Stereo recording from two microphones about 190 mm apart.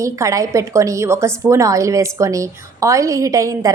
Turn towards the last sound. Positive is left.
turn(degrees=-15)  # may be behind; listen again after turning